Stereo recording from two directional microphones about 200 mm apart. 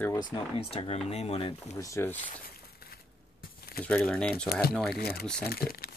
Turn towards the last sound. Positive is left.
turn(degrees=50)  # may be behind; listen again after turning